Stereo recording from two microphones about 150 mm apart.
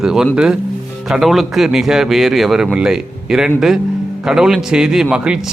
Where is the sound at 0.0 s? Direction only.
5° right (ahead or behind).